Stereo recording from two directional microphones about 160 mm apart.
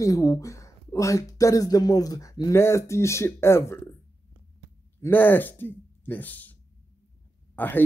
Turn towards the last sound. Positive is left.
turn(degrees=10)  # may be behind; listen again after turning